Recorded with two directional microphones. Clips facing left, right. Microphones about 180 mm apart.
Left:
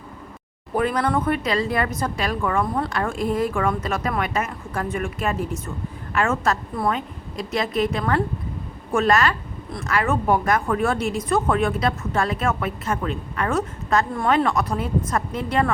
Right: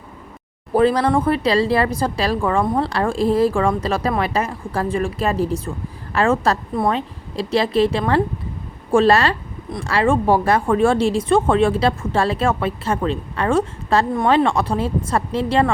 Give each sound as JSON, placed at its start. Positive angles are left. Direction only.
{"t": 0.7, "sound": "speech", "side_deg": -30}